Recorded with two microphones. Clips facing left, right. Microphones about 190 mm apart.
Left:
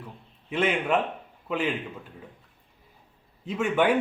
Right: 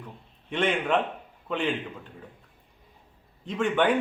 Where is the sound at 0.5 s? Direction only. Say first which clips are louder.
Even; 5° left (ahead or behind).